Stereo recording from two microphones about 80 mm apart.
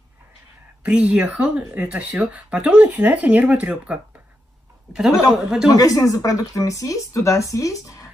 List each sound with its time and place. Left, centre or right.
0.8 s a woman's voice: centre
5.8 s speech: left